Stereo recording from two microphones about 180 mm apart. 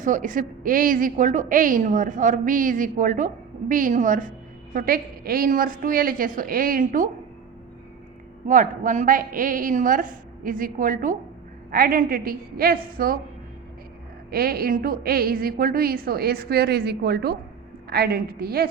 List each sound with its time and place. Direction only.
0.0 s a woman's voice: 45° right (ahead or behind)
8.4 s a woman's voice: 45° right (ahead or behind)
14.3 s a woman's voice: 55° right (ahead or behind)